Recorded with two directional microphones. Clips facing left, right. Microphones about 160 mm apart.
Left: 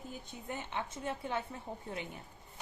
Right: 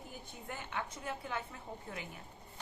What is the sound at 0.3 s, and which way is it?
Speech, 20° left (ahead or behind).